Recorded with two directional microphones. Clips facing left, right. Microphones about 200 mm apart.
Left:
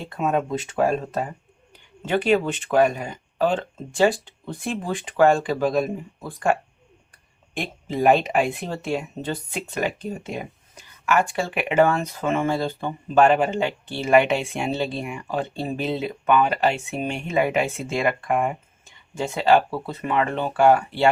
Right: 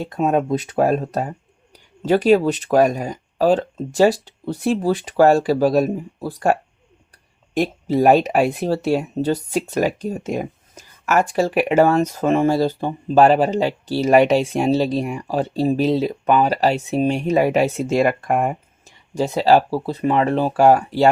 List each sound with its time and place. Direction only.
0.0 s speech: 40° right (ahead or behind)